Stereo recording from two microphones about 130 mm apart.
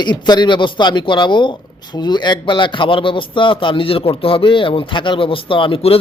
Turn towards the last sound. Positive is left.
turn(degrees=45)  # may be behind; listen again after turning